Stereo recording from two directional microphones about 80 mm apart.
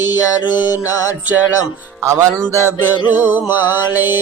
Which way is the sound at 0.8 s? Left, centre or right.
Left.